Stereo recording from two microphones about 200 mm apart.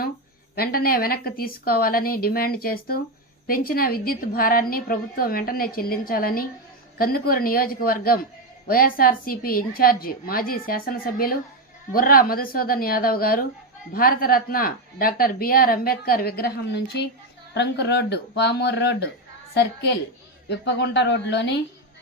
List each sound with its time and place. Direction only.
0.5 s a man's voice: 50° left (ahead or behind)